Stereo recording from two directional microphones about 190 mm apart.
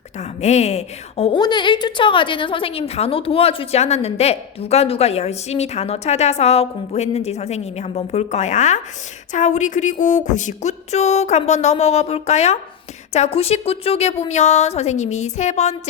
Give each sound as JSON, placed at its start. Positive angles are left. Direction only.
{"t": 0.2, "sound": "a woman's voice", "side_deg": 35}